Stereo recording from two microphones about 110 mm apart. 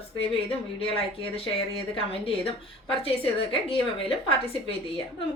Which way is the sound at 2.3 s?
55° left (ahead or behind).